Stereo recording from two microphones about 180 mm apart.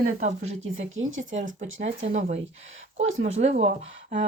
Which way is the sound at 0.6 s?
90° right.